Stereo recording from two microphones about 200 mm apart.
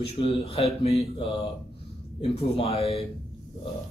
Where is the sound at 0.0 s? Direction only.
30° left (ahead or behind).